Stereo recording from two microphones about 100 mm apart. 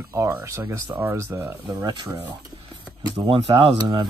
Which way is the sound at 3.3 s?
65° right (ahead or behind).